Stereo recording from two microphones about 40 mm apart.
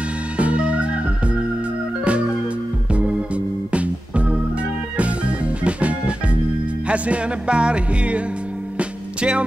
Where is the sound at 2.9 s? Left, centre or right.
Right.